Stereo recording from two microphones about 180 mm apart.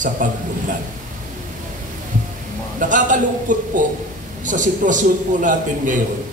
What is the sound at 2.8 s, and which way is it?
A man's voice, 45° right (ahead or behind).